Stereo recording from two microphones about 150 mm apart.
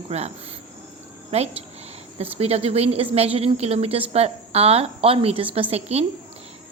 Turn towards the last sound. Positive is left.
turn(degrees=-45)  # may be behind; listen again after turning